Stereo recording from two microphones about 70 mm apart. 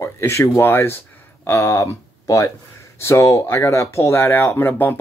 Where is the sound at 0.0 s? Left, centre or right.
Left.